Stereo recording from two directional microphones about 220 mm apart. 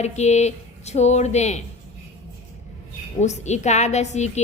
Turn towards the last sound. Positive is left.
turn(degrees=30)  # may be behind; listen again after turning